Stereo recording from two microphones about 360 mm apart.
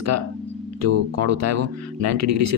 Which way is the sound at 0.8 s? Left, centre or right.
Right.